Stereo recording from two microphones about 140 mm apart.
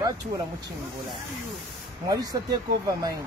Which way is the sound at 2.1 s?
25° right (ahead or behind).